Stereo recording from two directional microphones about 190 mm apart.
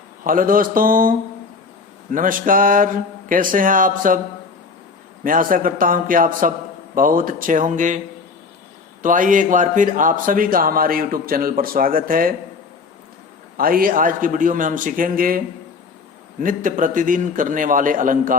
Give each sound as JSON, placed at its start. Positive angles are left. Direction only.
{"t": 0.3, "sound": "a man's voice", "side_deg": -45}
{"t": 2.1, "sound": "a man's voice", "side_deg": -45}
{"t": 5.2, "sound": "a man's voice", "side_deg": -45}
{"t": 13.6, "sound": "a man's voice", "side_deg": -50}
{"t": 16.4, "sound": "a man's voice", "side_deg": -45}